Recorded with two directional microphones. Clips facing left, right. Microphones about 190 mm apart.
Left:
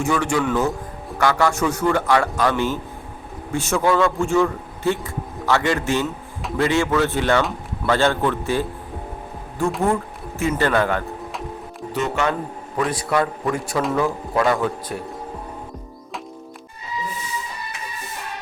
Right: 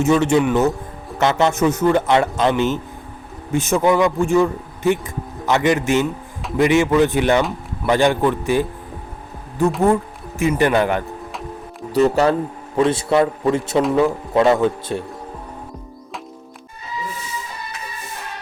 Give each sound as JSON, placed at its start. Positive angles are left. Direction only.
{"t": 0.0, "sound": "a man's voice", "side_deg": -20}
{"t": 9.8, "sound": "speech", "side_deg": -20}
{"t": 11.9, "sound": "a man's voice", "side_deg": -35}